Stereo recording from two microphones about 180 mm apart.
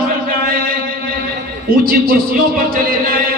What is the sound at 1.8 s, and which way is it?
A man's voice, 55° right (ahead or behind).